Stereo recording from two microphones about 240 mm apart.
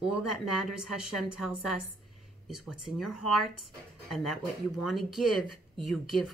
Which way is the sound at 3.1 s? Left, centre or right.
Left.